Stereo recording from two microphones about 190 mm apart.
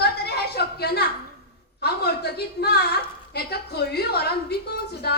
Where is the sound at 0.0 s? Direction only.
60° left (ahead or behind).